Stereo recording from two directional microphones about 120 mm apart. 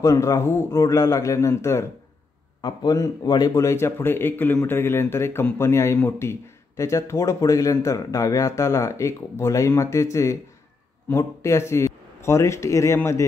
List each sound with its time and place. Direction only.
0.0 s speech: 25° left (ahead or behind)
2.6 s speech: 35° left (ahead or behind)
11.1 s a man's voice: 25° left (ahead or behind)